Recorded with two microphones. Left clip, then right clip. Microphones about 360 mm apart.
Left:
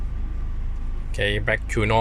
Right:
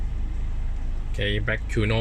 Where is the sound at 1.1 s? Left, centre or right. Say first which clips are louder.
Left 4 dB; centre.